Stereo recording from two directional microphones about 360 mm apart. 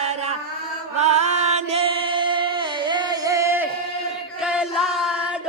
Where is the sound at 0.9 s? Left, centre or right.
Centre.